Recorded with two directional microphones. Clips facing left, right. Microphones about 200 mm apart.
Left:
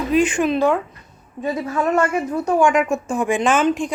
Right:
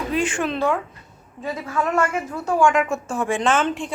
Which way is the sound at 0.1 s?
15° left (ahead or behind).